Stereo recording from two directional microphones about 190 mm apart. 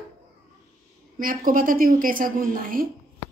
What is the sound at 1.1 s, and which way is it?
A woman's voice, 45° right (ahead or behind).